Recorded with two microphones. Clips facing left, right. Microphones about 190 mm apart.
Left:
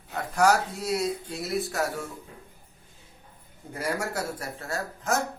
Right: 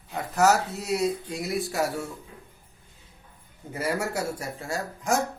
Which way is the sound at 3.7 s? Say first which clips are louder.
Right 2 dB; 5° right (ahead or behind).